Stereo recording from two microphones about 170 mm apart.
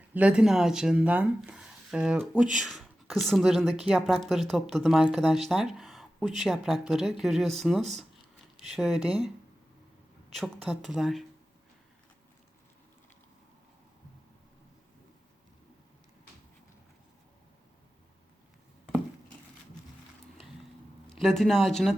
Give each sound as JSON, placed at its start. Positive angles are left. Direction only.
{"t": 0.1, "sound": "speech", "side_deg": -5}
{"t": 10.3, "sound": "speech", "side_deg": 0}
{"t": 21.2, "sound": "speech", "side_deg": 0}